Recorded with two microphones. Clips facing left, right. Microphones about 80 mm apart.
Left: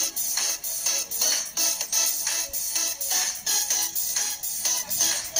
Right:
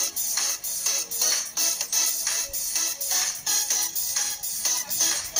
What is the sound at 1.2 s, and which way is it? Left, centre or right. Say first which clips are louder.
Music: even; centre.